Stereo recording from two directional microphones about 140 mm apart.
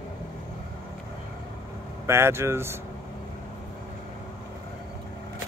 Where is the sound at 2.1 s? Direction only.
20° right (ahead or behind).